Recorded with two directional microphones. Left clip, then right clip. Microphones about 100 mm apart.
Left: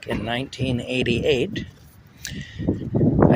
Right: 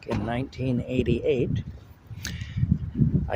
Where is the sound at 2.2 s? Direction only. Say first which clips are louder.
Left 2 dB; 65° right (ahead or behind).